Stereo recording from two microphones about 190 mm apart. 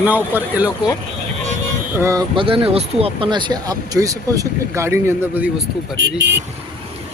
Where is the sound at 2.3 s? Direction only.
25° right (ahead or behind); by 5.6 s 10° right (ahead or behind).